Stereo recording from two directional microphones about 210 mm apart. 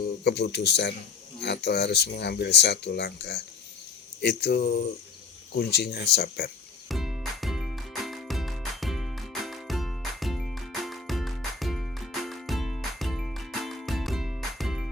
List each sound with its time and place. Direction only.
0.3 s speech: 50° left (ahead or behind)
6.8 s music: centre (ahead or behind)